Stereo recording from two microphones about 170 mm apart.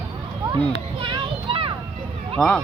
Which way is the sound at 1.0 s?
30° right (ahead or behind).